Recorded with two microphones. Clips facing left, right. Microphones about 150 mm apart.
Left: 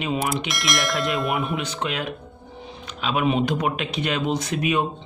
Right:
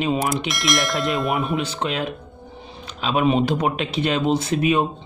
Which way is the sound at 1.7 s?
30° right (ahead or behind).